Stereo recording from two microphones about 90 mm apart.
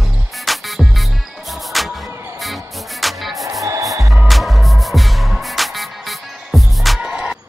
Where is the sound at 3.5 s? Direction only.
35° right (ahead or behind).